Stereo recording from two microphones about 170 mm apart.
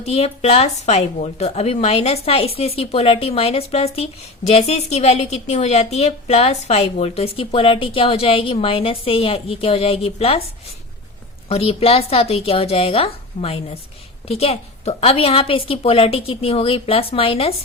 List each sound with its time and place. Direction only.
0.0 s a woman's voice: 40° left (ahead or behind)
11.4 s a woman's voice: 35° left (ahead or behind)